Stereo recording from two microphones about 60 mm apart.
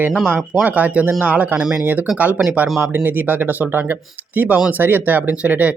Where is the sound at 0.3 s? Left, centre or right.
Right.